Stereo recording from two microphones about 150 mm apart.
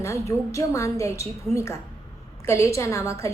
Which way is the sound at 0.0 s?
20° left (ahead or behind).